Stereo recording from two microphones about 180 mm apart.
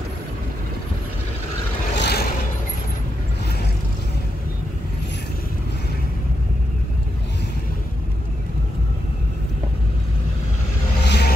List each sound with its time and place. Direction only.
2.0 s vehicle: 65° left (ahead or behind)
11.1 s vehicle: 65° left (ahead or behind)